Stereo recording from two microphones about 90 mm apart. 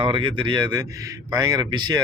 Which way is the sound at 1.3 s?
50° right (ahead or behind).